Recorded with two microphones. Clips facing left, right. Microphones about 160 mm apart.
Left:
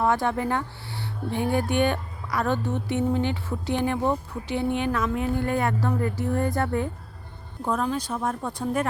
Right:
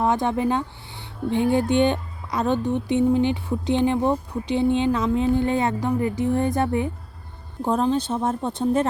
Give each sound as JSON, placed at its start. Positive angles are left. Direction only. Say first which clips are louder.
{"t": 0.0, "sound": "speech", "louder": "right 2 dB", "side_deg": -20}
{"t": 7.6, "sound": "speech", "louder": "right 5 dB", "side_deg": -30}